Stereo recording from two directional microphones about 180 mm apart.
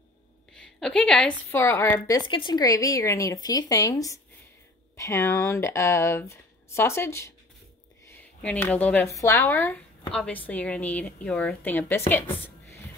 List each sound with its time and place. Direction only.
0.6 s a woman's voice: 5° left (ahead or behind)
12.4 s dishes: 15° left (ahead or behind)